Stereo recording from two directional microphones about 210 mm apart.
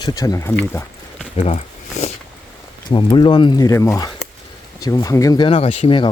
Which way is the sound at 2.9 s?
20° left (ahead or behind).